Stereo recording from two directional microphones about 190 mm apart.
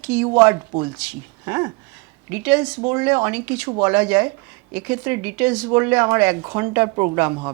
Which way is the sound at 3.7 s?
20° right (ahead or behind).